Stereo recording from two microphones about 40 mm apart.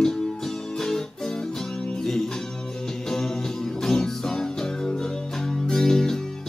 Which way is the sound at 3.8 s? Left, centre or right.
Centre.